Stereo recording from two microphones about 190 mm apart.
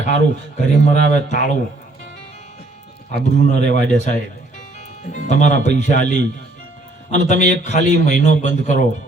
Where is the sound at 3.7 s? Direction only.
65° right (ahead or behind).